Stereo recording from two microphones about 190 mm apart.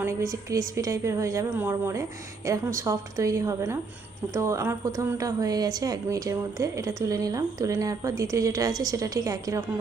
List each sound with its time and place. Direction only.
0.0 s a woman's voice: 15° right (ahead or behind)